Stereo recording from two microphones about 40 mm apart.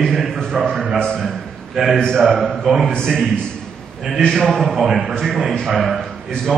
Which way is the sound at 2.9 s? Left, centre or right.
Centre.